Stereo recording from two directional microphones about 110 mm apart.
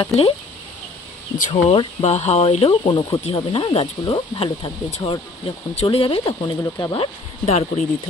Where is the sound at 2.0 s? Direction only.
80° left.